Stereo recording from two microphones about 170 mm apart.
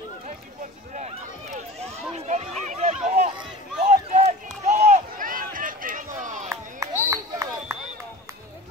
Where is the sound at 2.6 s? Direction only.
40° right (ahead or behind).